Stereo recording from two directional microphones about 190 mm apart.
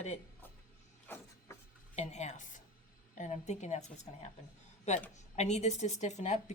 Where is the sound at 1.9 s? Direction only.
35° left (ahead or behind).